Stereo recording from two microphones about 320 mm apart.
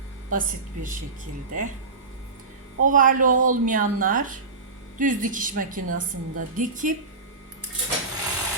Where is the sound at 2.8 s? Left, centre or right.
Right.